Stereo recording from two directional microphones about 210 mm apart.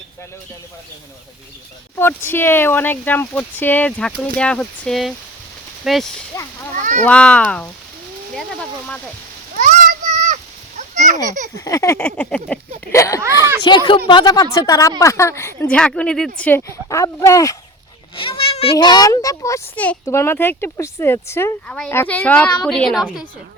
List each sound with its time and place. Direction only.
2.0 s speech: 10° left (ahead or behind)
6.3 s speech: 15° left (ahead or behind)
9.6 s a sound: 35° right (ahead or behind)
11.5 s speech: 15° left (ahead or behind)
13.2 s speech: 15° right (ahead or behind)
13.7 s speech: 20° left (ahead or behind)
18.2 s speech: 25° left (ahead or behind); by 23.2 s centre (ahead or behind)